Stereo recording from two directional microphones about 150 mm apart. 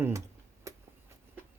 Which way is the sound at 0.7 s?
20° right (ahead or behind).